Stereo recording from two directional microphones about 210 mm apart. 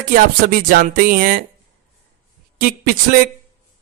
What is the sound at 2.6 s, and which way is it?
Speech, 45° right (ahead or behind).